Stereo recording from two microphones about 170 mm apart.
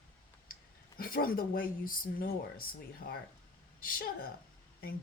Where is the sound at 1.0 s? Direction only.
60° left (ahead or behind).